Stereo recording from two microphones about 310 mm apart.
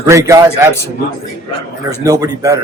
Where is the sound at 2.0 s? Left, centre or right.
Centre.